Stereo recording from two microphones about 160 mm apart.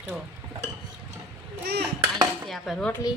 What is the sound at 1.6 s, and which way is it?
Speech, 90° right.